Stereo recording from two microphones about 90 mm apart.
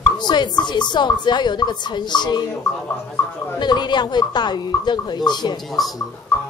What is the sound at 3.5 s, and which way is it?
Speech, 55° left (ahead or behind).